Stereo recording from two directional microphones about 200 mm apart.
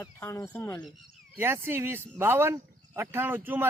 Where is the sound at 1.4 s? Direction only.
10° right (ahead or behind).